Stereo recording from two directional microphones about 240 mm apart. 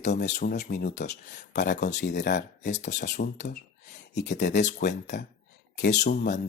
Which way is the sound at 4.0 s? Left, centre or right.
Left.